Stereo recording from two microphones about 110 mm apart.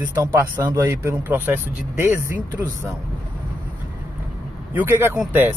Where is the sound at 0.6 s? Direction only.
30° right (ahead or behind).